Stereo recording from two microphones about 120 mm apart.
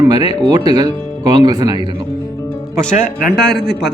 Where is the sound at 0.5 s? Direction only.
35° right (ahead or behind).